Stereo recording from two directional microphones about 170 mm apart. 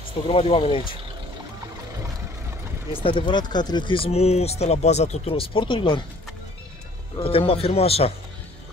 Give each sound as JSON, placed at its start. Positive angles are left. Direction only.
{"t": 0.3, "sound": "speech", "side_deg": 35}
{"t": 2.9, "sound": "speech", "side_deg": 30}
{"t": 7.2, "sound": "speech", "side_deg": 35}